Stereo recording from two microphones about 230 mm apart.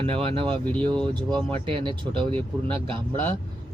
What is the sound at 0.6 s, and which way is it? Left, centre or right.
Speech, centre.